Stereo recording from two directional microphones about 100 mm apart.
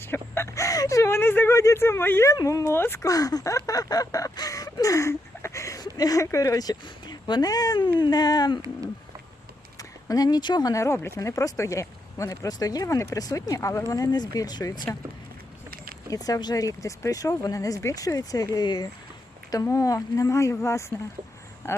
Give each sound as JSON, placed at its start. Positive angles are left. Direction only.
{"t": 0.0, "sound": "speech", "side_deg": 25}
{"t": 2.3, "sound": "speech", "side_deg": 35}
{"t": 3.1, "sound": "a sound", "side_deg": 40}
{"t": 6.2, "sound": "speech", "side_deg": 35}
{"t": 9.7, "sound": "speech", "side_deg": 40}
{"t": 16.0, "sound": "speech", "side_deg": 35}
{"t": 19.6, "sound": "speech", "side_deg": 30}